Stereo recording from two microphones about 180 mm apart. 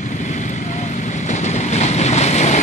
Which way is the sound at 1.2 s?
40° left (ahead or behind).